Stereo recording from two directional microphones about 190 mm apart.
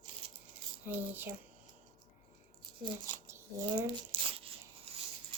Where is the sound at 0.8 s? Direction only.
10° right (ahead or behind).